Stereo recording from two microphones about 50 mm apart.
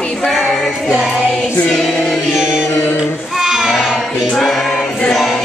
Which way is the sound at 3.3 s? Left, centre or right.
Centre.